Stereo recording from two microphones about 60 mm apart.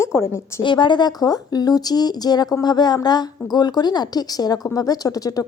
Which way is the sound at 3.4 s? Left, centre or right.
Left.